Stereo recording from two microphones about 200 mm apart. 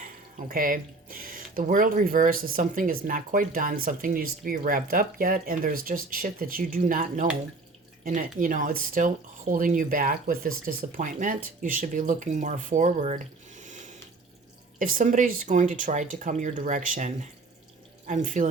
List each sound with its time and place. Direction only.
0.0 s speech: 45° right (ahead or behind)